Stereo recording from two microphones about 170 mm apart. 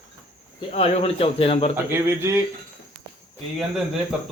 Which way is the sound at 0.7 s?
35° left (ahead or behind).